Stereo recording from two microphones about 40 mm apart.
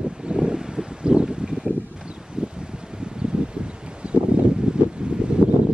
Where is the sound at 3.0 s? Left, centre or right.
Right.